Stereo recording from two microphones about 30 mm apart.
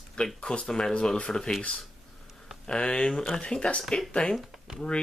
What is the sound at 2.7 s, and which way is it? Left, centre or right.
Speech, left.